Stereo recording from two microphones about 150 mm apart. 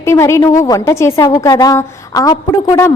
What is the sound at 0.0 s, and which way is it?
A woman's voice, 20° left (ahead or behind).